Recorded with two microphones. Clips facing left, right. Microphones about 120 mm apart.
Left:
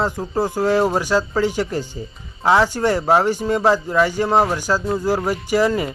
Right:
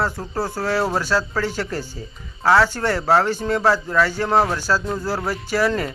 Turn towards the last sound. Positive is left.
turn(degrees=15)  # may be behind; listen again after turning